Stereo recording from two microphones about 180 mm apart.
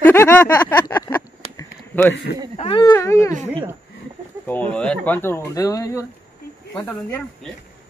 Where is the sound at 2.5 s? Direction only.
30° left (ahead or behind).